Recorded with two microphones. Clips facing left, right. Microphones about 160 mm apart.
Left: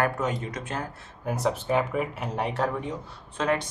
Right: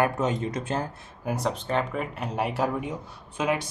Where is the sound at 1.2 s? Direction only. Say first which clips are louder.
Left 2 dB; centre (ahead or behind).